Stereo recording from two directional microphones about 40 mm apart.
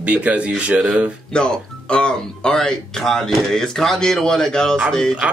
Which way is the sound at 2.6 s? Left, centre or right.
Centre.